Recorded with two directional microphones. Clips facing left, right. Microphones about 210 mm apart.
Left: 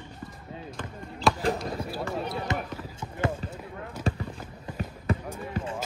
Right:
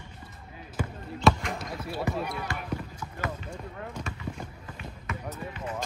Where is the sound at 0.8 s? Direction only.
10° right (ahead or behind).